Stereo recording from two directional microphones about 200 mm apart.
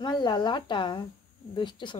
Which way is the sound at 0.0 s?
20° left (ahead or behind).